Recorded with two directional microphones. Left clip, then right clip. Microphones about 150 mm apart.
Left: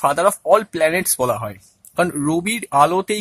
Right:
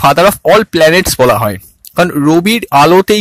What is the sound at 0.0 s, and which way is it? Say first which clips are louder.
Speech: right 9 dB; 50° right (ahead or behind).